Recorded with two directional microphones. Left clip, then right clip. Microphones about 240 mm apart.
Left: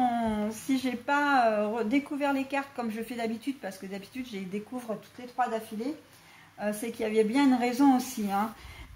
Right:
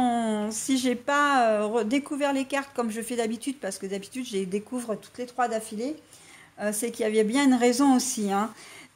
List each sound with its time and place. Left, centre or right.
0.0 s speech: right
6.6 s speech: right